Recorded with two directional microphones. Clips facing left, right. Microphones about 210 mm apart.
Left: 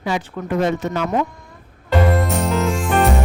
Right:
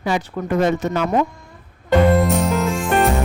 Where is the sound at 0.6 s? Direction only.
45° right (ahead or behind).